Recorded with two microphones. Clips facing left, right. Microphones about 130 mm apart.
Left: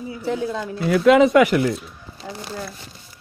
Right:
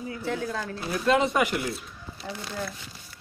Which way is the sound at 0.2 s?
15° left (ahead or behind).